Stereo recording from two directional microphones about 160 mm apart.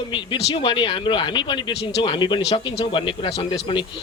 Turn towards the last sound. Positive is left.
turn(degrees=30)  # may be behind; listen again after turning